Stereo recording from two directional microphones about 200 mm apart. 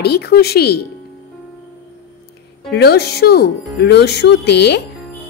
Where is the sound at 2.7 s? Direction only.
55° left (ahead or behind).